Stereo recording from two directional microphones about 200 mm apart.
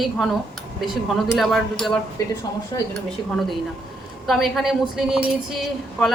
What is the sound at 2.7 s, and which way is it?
Speech, 20° left (ahead or behind).